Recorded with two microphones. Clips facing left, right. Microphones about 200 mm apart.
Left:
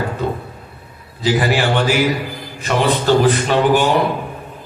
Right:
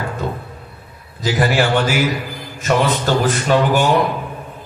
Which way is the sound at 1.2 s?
45° right (ahead or behind).